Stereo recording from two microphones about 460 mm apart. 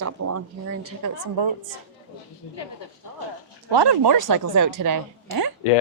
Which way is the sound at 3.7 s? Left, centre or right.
Right.